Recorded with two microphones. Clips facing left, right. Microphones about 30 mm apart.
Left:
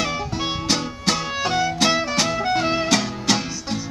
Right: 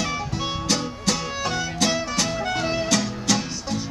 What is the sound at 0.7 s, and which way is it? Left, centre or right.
Music, left.